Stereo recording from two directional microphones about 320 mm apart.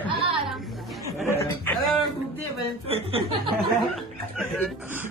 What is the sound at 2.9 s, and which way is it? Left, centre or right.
Speech, centre.